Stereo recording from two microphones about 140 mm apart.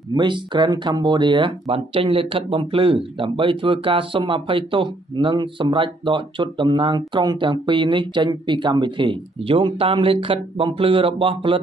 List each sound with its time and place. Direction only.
0.1 s speech: 35° right (ahead or behind)